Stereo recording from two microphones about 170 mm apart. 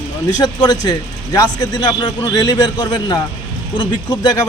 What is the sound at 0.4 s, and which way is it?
Speech, 25° left (ahead or behind).